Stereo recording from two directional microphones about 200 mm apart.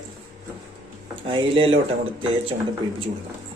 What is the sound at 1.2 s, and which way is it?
Speech, 25° right (ahead or behind).